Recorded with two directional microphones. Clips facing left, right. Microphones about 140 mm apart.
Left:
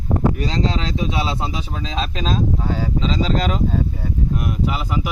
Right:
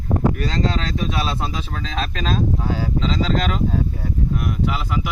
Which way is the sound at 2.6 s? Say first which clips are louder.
Left 1 dB; 5° right (ahead or behind).